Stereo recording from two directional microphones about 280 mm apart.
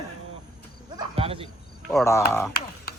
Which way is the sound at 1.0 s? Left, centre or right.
Centre.